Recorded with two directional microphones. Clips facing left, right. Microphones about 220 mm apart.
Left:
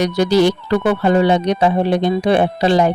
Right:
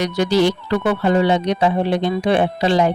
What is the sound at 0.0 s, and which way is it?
Speech, 40° left (ahead or behind).